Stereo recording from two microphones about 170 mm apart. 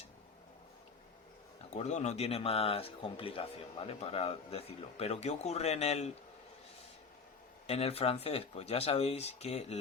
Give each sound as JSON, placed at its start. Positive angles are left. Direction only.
{"t": 1.7, "sound": "speech", "side_deg": 40}
{"t": 7.7, "sound": "speech", "side_deg": 35}